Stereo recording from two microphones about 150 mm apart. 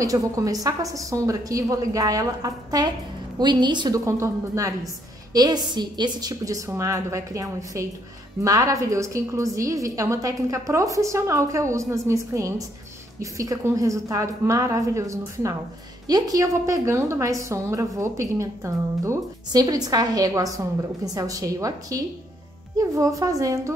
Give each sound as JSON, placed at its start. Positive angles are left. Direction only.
{"t": 0.0, "sound": "a woman's voice", "side_deg": -20}